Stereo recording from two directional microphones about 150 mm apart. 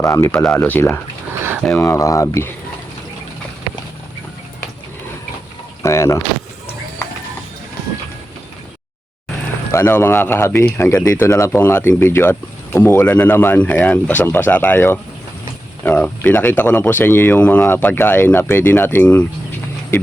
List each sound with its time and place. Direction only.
0.0 s speech: 20° left (ahead or behind)
0.3 s speech: 10° left (ahead or behind)
5.8 s speech: 20° left (ahead or behind)
9.7 s speech: 15° left (ahead or behind)